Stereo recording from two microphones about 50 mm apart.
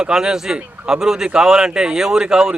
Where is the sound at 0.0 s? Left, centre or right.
Centre.